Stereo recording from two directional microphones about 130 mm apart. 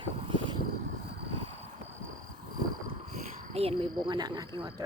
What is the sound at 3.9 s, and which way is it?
Speech, 35° right (ahead or behind).